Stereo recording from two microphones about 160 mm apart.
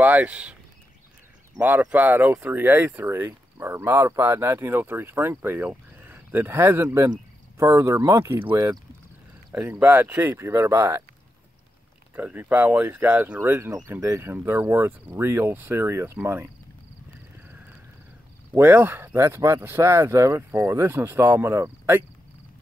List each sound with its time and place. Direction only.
0.0 s speech: 10° right (ahead or behind)
1.6 s speech: 10° right (ahead or behind)
9.5 s speech: 10° right (ahead or behind)
12.2 s speech: 10° right (ahead or behind)
18.5 s speech: 10° right (ahead or behind)